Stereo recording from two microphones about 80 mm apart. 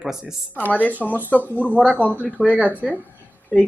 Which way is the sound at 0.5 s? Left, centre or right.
Centre.